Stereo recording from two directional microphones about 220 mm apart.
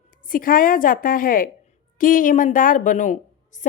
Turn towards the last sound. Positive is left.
turn(degrees=35)  # may be behind; listen again after turning